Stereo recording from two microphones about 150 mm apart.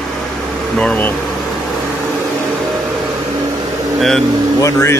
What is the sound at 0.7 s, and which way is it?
Speech, 10° left (ahead or behind).